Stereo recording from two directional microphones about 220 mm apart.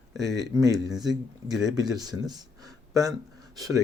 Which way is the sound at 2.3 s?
15° right (ahead or behind).